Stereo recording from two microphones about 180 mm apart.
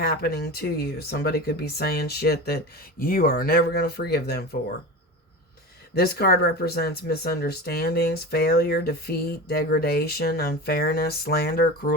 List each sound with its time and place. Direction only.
0.0 s speech: 60° left (ahead or behind)
5.9 s speech: 60° left (ahead or behind)